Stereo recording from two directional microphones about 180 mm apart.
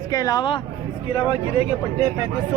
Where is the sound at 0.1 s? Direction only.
20° left (ahead or behind).